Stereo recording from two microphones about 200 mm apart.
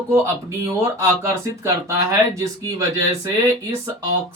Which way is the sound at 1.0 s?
15° right (ahead or behind).